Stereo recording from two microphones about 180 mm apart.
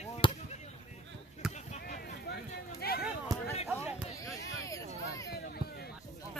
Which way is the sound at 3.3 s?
20° right (ahead or behind).